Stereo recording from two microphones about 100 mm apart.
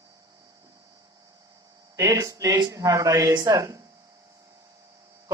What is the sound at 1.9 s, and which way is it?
Speech, 35° right (ahead or behind).